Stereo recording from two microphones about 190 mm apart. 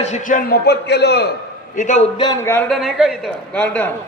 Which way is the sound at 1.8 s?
40° left (ahead or behind).